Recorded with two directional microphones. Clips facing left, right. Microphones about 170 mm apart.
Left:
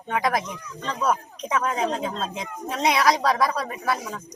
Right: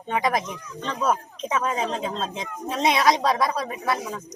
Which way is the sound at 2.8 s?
25° right (ahead or behind).